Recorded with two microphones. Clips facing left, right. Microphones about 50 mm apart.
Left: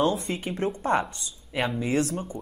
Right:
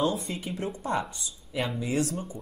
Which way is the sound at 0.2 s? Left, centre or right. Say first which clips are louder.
Left 4 dB; left.